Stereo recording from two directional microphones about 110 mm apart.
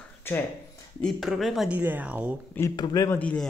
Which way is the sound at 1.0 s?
Centre (ahead or behind).